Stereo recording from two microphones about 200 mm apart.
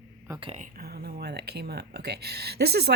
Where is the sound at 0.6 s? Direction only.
50° right (ahead or behind).